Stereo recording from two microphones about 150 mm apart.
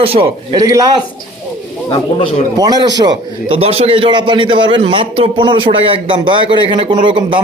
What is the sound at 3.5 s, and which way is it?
A man's voice, 40° right (ahead or behind).